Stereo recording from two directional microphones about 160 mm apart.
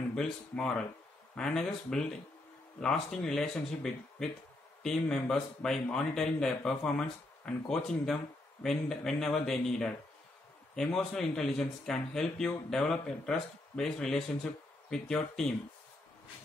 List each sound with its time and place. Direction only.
0.1 s speech: 5° left (ahead or behind)